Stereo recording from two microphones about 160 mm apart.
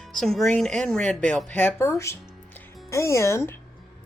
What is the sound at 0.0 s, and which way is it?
Speech, centre (ahead or behind).